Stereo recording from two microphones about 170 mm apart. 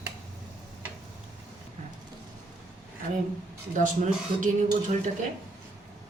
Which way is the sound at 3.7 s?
50° right (ahead or behind).